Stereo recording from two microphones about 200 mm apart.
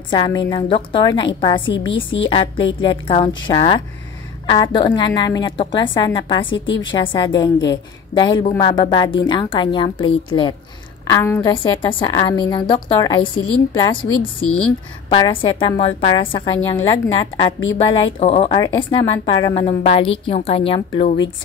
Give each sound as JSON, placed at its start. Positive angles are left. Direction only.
{"t": 0.1, "sound": "a woman's voice", "side_deg": 20}
{"t": 16.5, "sound": "a woman's voice", "side_deg": 10}
{"t": 17.2, "sound": "a woman's voice", "side_deg": 20}